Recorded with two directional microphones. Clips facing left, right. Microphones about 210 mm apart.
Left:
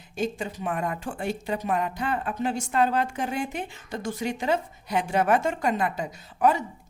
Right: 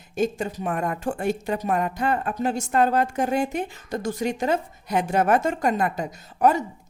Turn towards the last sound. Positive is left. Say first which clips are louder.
# right 3 dB
turn(degrees=-45)  # may be behind; listen again after turning